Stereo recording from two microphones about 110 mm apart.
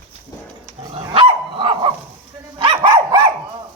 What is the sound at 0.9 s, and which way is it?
Dog, 60° right (ahead or behind).